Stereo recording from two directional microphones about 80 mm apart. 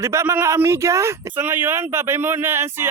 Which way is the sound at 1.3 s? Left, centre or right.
Right.